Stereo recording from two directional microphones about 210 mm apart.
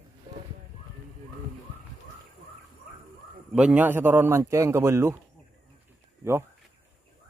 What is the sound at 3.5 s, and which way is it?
A man's voice, 5° right (ahead or behind).